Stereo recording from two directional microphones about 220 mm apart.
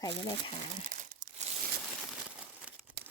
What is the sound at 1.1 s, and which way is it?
Crumpling, 35° right (ahead or behind).